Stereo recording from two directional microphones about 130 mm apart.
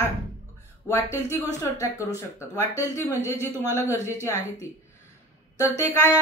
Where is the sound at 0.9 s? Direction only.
20° left (ahead or behind).